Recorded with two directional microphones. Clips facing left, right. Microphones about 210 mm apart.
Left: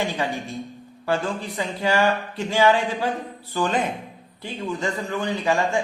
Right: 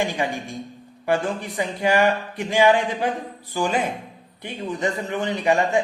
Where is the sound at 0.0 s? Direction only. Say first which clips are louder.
Right 1 dB; 15° right (ahead or behind).